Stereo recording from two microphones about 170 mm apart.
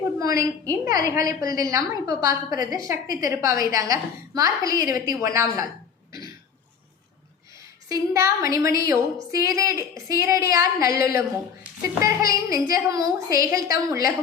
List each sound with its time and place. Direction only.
0.2 s a woman's voice: 20° right (ahead or behind)
7.9 s a woman's voice: 20° right (ahead or behind)